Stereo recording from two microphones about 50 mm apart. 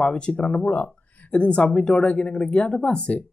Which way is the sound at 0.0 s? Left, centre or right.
Left.